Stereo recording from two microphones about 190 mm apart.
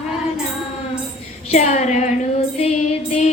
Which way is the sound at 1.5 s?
35° left (ahead or behind).